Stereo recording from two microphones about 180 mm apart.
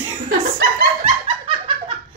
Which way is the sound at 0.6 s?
55° right (ahead or behind).